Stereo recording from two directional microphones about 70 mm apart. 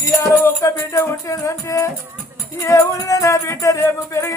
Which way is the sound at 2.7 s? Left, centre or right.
Left.